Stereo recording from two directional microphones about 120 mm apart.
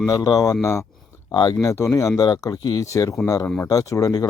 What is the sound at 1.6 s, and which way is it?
Speech, 25° left (ahead or behind).